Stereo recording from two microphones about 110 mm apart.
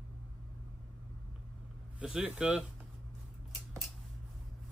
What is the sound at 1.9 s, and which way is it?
Speech, 10° right (ahead or behind).